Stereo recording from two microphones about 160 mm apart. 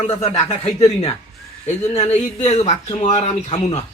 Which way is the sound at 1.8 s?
45° left (ahead or behind).